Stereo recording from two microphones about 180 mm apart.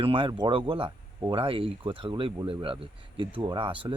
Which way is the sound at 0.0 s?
30° right (ahead or behind).